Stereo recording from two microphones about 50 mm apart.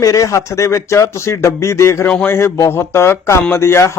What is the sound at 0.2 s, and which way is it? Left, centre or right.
Speech, left.